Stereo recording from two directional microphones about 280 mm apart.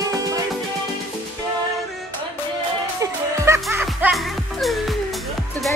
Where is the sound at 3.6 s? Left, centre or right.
Centre.